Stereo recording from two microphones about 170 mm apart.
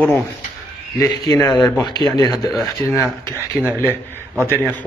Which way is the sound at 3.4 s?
10° right (ahead or behind).